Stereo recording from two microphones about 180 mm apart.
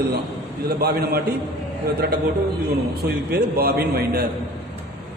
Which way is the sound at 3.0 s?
65° right (ahead or behind).